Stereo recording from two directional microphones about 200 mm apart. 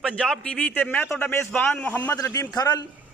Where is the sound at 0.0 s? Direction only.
5° left (ahead or behind).